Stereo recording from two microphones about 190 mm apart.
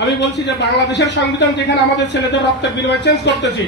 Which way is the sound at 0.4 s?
65° left (ahead or behind).